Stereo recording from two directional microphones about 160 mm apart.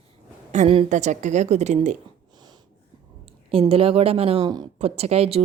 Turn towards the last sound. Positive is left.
turn(degrees=-40)  # may be behind; listen again after turning